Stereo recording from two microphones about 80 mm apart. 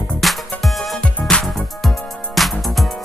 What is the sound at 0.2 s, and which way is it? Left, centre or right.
Music, centre.